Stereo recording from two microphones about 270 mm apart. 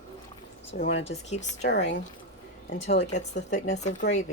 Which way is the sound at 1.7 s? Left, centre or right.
Left.